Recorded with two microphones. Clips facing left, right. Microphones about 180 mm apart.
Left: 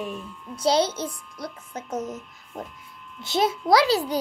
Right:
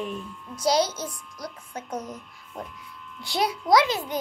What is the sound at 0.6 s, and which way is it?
A child's voice, 30° left (ahead or behind).